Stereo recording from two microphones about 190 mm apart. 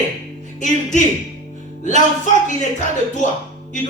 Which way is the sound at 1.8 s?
40° left (ahead or behind).